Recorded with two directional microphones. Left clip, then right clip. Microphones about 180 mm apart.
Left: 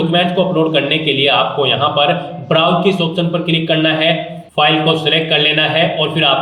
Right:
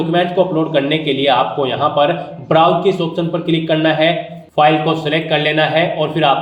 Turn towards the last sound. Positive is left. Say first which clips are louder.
# even
turn(degrees=-35)  # may be behind; listen again after turning